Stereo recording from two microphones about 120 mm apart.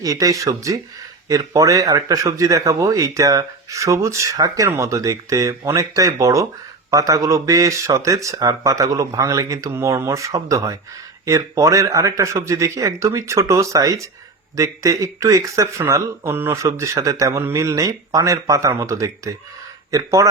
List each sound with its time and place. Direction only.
0.0 s speech: 30° right (ahead or behind)